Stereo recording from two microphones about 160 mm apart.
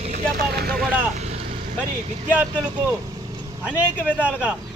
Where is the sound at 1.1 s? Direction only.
45° right (ahead or behind).